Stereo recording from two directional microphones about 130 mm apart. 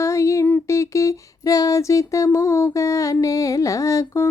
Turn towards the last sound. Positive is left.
turn(degrees=25)  # may be behind; listen again after turning